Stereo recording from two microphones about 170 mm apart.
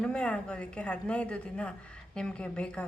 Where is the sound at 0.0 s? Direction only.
5° left (ahead or behind).